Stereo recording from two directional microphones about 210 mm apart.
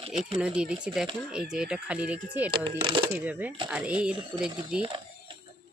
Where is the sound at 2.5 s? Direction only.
25° right (ahead or behind).